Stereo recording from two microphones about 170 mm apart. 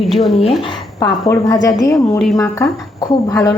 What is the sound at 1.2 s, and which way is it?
A woman's voice, 20° left (ahead or behind).